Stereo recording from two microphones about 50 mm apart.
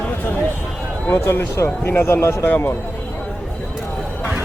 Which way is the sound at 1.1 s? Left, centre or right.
Left.